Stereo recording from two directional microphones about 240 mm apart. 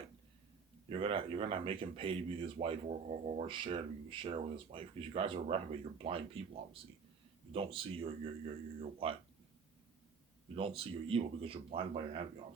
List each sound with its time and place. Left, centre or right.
0.9 s speech: right
7.5 s speech: right
10.5 s speech: right